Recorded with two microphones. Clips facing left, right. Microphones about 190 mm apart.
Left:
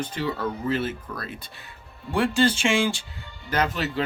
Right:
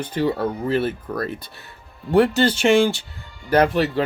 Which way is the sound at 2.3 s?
65° right (ahead or behind).